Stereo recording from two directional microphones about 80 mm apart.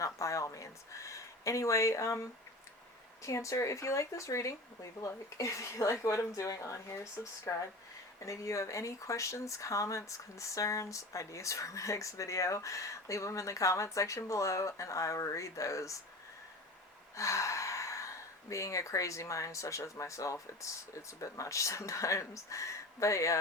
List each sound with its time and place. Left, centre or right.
0.0 s a sound: left
3.2 s speech: left
17.2 s speech: left